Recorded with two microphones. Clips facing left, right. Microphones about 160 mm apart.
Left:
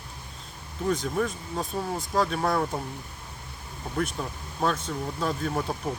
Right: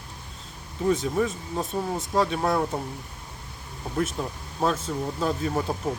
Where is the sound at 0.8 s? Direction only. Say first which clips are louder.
Right 3 dB; 5° right (ahead or behind).